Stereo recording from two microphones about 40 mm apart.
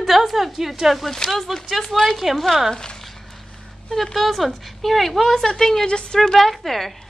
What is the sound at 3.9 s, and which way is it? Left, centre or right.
Speech, centre.